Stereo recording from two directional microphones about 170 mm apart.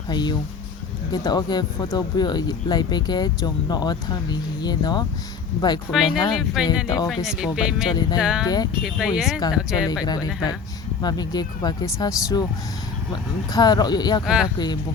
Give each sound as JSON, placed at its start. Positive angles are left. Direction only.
{"t": 0.1, "sound": "speech", "side_deg": 25}
{"t": 6.3, "sound": "speech", "side_deg": -5}
{"t": 6.8, "sound": "speech", "side_deg": 25}
{"t": 7.3, "sound": "speech", "side_deg": 0}
{"t": 7.9, "sound": "speech", "side_deg": 25}
{"t": 8.2, "sound": "speech", "side_deg": -5}
{"t": 8.4, "sound": "speech", "side_deg": 25}
{"t": 8.8, "sound": "speech", "side_deg": -5}
{"t": 11.0, "sound": "speech", "side_deg": 25}
{"t": 13.5, "sound": "speech", "side_deg": 25}
{"t": 14.3, "sound": "speech", "side_deg": -5}